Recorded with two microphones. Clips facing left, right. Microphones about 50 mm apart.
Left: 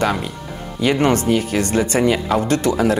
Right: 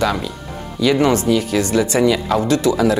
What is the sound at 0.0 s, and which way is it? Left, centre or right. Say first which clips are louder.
Speech: even; left.